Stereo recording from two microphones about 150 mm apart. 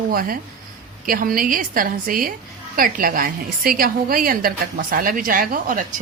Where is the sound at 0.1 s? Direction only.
75° right (ahead or behind).